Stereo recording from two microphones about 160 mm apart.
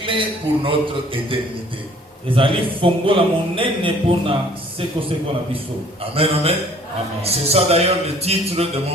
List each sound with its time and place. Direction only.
0.0 s a man's voice: 30° right (ahead or behind)
6.1 s a man's voice: 35° right (ahead or behind)